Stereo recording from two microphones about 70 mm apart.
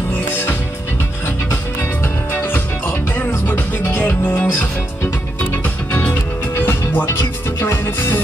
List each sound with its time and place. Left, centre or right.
1.2 s music: left